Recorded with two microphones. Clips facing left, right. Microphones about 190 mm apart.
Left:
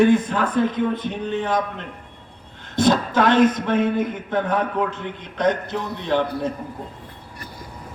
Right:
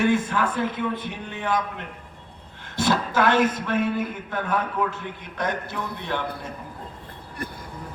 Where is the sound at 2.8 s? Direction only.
20° left (ahead or behind).